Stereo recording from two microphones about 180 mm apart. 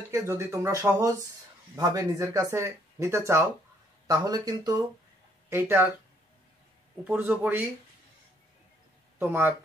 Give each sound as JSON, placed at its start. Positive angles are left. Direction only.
{"t": 0.1, "sound": "speech", "side_deg": -15}
{"t": 7.1, "sound": "speech", "side_deg": -10}
{"t": 9.2, "sound": "speech", "side_deg": -10}